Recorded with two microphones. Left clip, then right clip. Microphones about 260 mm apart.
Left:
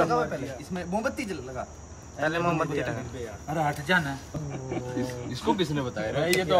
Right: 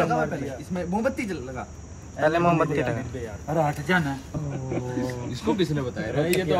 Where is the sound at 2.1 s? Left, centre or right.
Centre.